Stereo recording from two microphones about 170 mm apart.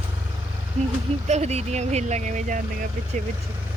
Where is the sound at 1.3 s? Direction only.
40° right (ahead or behind).